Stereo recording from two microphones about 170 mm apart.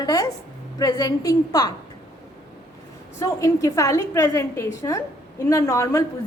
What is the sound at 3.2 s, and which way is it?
A woman's voice, 20° left (ahead or behind).